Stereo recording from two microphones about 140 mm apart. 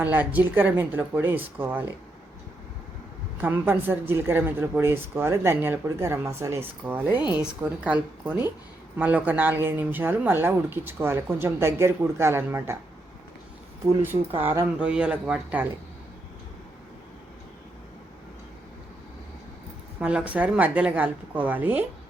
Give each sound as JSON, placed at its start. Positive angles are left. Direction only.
{"t": 0.0, "sound": "a woman's voice", "side_deg": -15}
{"t": 3.4, "sound": "a woman's voice", "side_deg": -15}
{"t": 14.8, "sound": "a woman's voice", "side_deg": -10}
{"t": 20.0, "sound": "a woman's voice", "side_deg": -10}